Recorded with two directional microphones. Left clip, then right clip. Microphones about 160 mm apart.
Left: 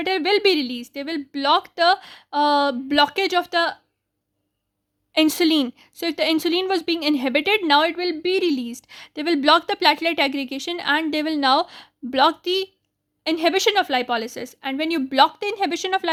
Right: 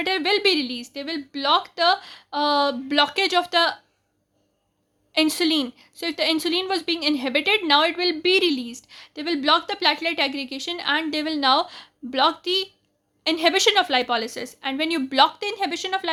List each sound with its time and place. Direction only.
0.0 s a woman's voice: 30° left (ahead or behind)
5.1 s a woman's voice: 40° left (ahead or behind); by 8.6 s 20° left (ahead or behind)
8.6 s a woman's voice: 45° left (ahead or behind)